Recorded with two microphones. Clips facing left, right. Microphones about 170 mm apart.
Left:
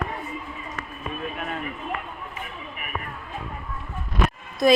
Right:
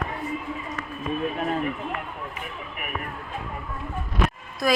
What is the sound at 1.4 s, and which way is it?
Speech, 35° right (ahead or behind).